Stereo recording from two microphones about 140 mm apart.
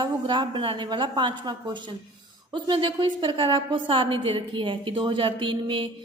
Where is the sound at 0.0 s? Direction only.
35° right (ahead or behind).